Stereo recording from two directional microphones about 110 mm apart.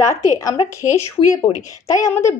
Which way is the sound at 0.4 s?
30° left (ahead or behind).